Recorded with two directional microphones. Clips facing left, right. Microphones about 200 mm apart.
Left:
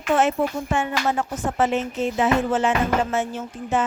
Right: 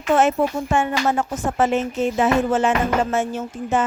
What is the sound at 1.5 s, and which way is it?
A woman's voice, 45° right (ahead or behind).